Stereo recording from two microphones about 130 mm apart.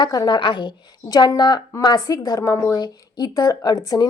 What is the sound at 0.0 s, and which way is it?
Speech, 30° left (ahead or behind).